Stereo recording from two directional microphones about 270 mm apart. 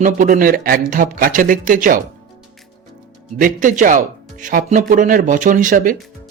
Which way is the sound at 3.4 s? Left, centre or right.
Right.